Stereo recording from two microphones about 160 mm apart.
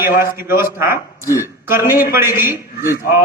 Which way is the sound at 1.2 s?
20° left (ahead or behind).